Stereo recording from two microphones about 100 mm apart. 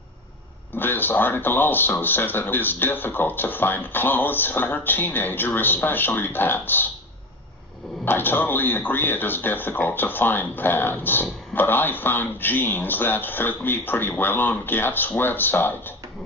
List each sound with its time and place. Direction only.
0.8 s speech: 20° left (ahead or behind)
8.0 s speech: 20° left (ahead or behind)